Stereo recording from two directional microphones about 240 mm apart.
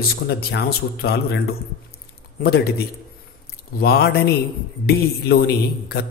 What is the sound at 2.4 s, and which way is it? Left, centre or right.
Speech, left.